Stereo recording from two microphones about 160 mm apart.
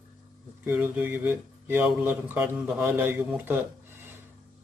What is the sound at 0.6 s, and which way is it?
Speech, 10° right (ahead or behind).